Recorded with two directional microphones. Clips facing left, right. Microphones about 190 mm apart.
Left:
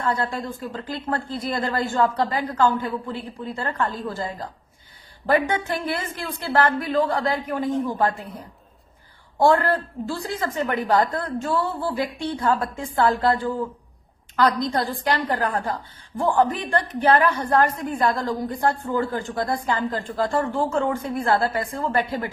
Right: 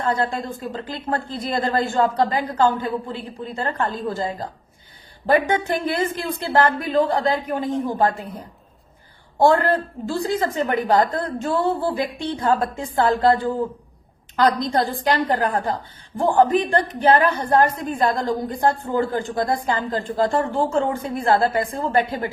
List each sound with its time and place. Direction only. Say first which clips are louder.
0.0 s a woman's voice: right 2 dB; 25° right (ahead or behind)
9.4 s a woman's voice: right 2 dB; 20° right (ahead or behind)